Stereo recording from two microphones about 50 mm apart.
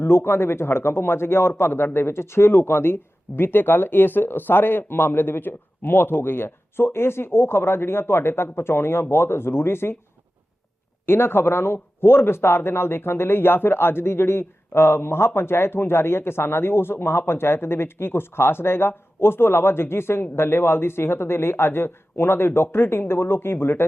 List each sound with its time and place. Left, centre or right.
0.3 s a man's voice: left
11.0 s a man's voice: left